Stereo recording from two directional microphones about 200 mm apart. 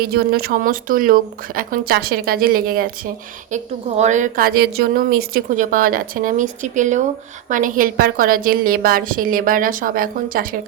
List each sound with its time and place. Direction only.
0.1 s a woman's voice: 50° right (ahead or behind)